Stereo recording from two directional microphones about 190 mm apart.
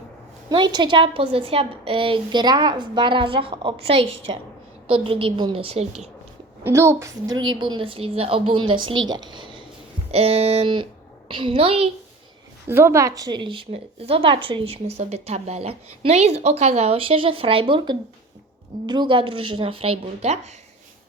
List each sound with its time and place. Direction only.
0.5 s a woman's voice: 25° right (ahead or behind)
6.7 s a woman's voice: 15° right (ahead or behind); by 11.9 s 30° right (ahead or behind)
12.6 s a woman's voice: 10° right (ahead or behind); by 20.5 s 35° right (ahead or behind)